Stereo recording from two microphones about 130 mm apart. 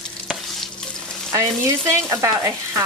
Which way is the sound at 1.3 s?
25° right (ahead or behind).